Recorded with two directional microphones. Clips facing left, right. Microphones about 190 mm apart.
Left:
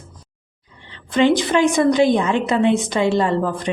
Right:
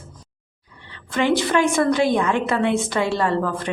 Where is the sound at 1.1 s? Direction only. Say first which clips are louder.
Left 3 dB; 20° left (ahead or behind).